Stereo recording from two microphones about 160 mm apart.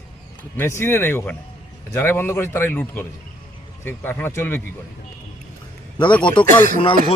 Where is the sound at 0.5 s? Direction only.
15° left (ahead or behind).